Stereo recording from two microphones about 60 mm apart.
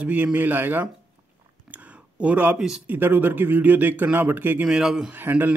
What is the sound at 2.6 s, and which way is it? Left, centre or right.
Speech, centre.